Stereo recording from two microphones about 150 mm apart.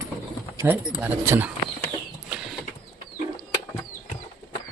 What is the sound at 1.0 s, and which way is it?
Speech, 10° right (ahead or behind).